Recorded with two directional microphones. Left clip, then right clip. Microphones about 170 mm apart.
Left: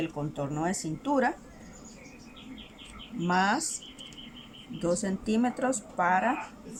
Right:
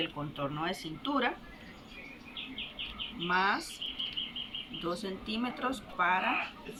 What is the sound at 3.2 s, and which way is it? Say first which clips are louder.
Speech: left 3 dB; 40° left (ahead or behind).